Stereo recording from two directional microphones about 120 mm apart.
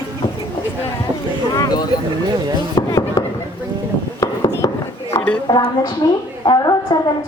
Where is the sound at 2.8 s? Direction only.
30° left (ahead or behind).